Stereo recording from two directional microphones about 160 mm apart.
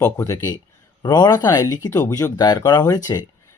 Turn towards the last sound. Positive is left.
turn(degrees=20)  # may be behind; listen again after turning